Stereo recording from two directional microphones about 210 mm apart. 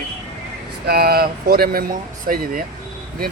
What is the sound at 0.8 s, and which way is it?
Speech, 45° right (ahead or behind).